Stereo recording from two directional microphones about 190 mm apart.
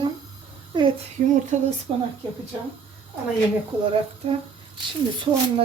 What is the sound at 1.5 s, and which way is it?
Speech, 40° right (ahead or behind).